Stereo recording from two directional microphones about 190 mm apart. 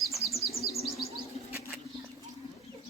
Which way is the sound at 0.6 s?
55° left (ahead or behind).